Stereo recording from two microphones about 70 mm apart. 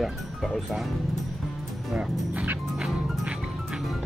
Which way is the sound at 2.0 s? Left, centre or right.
Right.